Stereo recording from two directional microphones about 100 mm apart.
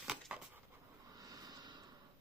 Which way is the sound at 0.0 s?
5° right (ahead or behind).